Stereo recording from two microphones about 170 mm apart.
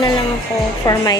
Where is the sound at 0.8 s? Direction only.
20° left (ahead or behind).